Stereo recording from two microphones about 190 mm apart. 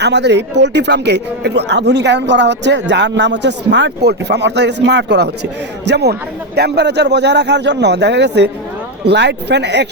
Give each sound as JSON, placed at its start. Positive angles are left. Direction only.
{"t": 0.0, "sound": "speech", "side_deg": -65}